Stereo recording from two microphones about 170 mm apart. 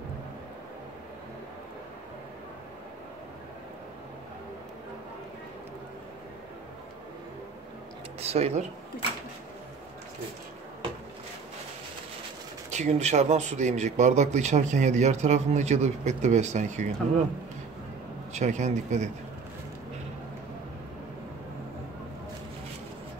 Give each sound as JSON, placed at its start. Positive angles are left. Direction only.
{"t": 8.2, "sound": "speech", "side_deg": -40}
{"t": 12.7, "sound": "speech", "side_deg": -40}
{"t": 18.3, "sound": "speech", "side_deg": -45}